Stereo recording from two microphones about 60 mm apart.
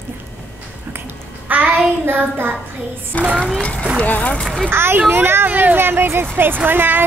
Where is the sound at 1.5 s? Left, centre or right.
Right.